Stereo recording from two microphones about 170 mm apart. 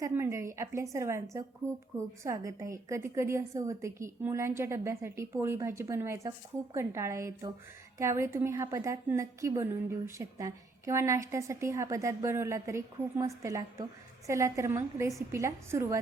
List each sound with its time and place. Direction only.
0.0 s a woman's voice: 15° right (ahead or behind)